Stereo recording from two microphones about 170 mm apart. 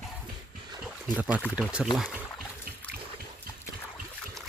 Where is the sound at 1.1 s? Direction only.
10° right (ahead or behind).